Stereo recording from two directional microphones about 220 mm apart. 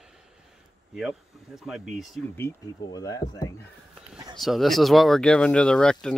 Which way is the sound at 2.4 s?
15° left (ahead or behind).